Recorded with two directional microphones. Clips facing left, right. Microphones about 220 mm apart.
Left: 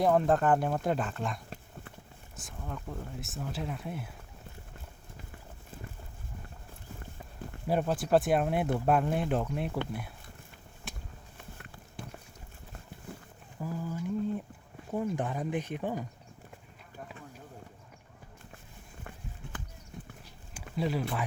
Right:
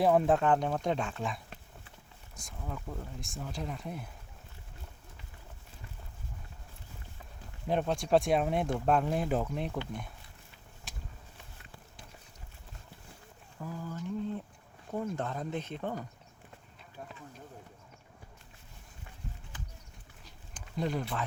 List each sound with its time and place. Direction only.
0.0 s speech: centre (ahead or behind)
7.7 s speech: 5° left (ahead or behind)
11.5 s a sound: 55° left (ahead or behind)
13.6 s a sound: 10° left (ahead or behind)
14.9 s speech: 15° left (ahead or behind)
20.5 s speech: 5° left (ahead or behind)